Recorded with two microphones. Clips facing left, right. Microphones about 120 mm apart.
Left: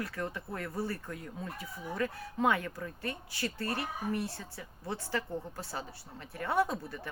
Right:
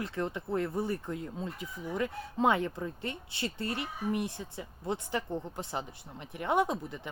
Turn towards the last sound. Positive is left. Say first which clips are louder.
# right 1 dB
turn(degrees=-20)  # may be behind; listen again after turning